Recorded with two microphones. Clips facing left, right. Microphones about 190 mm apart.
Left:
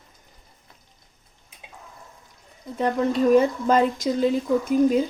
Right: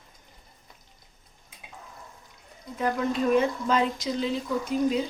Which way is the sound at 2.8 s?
35° left (ahead or behind).